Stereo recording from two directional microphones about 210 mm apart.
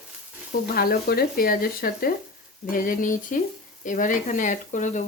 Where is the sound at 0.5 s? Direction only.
45° left (ahead or behind).